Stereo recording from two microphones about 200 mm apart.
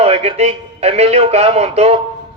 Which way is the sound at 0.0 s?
30° right (ahead or behind).